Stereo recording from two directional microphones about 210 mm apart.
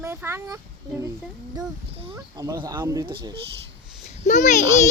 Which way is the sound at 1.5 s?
25° right (ahead or behind).